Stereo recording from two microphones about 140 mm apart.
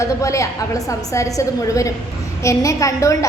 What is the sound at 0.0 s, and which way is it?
A woman's voice, 20° left (ahead or behind).